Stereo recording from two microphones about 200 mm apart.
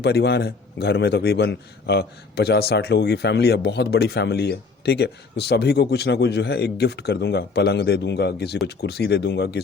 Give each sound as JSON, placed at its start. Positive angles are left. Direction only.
{"t": 0.0, "sound": "a man's voice", "side_deg": 55}